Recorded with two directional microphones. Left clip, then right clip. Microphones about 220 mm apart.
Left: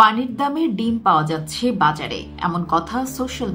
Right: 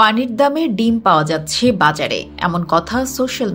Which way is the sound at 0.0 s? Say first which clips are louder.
Right 2 dB; 20° right (ahead or behind).